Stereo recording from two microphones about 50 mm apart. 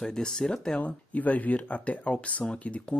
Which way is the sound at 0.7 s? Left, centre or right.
Left.